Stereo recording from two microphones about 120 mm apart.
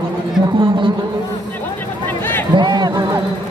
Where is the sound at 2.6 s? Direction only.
40° right (ahead or behind).